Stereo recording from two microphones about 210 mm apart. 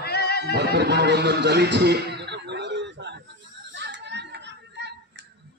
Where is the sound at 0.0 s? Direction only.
50° left (ahead or behind).